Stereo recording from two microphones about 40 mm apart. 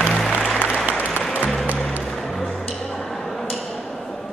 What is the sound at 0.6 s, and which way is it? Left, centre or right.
Applause, left.